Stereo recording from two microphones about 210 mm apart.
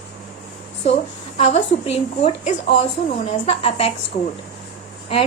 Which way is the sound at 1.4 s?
30° left (ahead or behind).